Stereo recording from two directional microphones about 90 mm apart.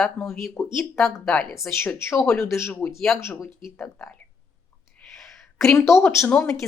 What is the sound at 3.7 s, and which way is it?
Speech, 15° left (ahead or behind).